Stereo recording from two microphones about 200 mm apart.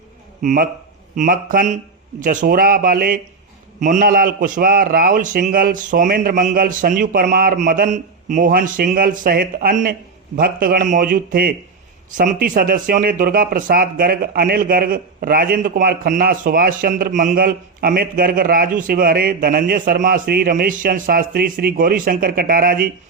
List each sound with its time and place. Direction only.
0.4 s speech: 45° right (ahead or behind)